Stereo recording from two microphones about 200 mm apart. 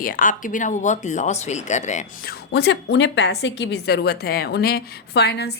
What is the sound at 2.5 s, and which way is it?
A woman's voice, 55° left (ahead or behind).